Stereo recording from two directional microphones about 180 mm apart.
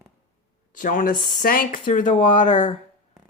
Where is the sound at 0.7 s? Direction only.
45° left (ahead or behind).